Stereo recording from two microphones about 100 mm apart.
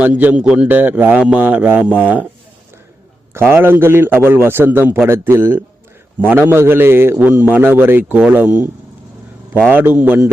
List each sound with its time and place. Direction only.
0.0 s a man's voice: 15° right (ahead or behind)
3.3 s a man's voice: 25° right (ahead or behind)
9.6 s a man's voice: 15° right (ahead or behind)